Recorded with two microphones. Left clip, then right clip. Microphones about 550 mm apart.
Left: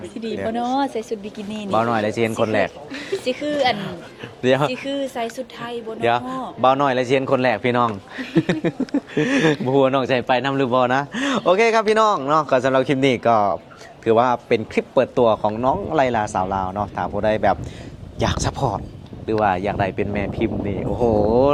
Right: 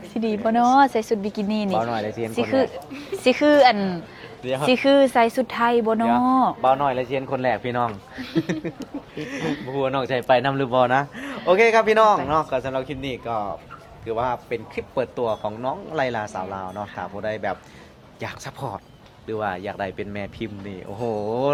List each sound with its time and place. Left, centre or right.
0.2 s speech: right
1.7 s speech: centre
3.2 s speech: right
4.4 s speech: left
4.7 s speech: right
5.5 s speech: right
6.6 s speech: left
7.3 s speech: centre
8.4 s speech: left
9.1 s speech: left
19.3 s speech: centre